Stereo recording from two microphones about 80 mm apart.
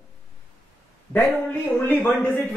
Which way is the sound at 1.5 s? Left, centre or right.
Centre.